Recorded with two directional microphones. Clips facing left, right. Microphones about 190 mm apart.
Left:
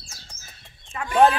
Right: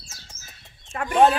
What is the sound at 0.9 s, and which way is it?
Speech, 55° right (ahead or behind).